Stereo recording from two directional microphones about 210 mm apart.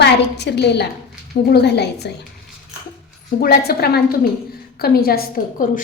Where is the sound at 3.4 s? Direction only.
50° left (ahead or behind).